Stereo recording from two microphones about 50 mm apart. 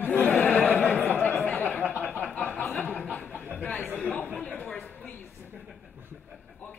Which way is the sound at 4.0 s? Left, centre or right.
Left.